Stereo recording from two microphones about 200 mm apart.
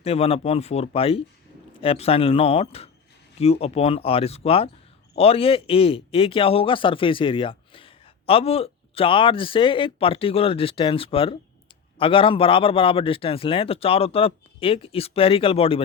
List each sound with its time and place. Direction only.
0.0 s a man's voice: 30° left (ahead or behind)